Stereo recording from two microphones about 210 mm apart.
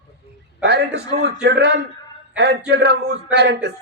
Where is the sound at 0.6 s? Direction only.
50° right (ahead or behind).